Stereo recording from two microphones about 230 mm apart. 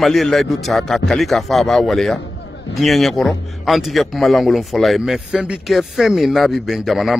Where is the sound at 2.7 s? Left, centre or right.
Centre.